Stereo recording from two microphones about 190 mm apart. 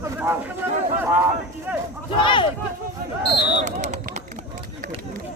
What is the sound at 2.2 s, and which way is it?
Speech, 25° left (ahead or behind).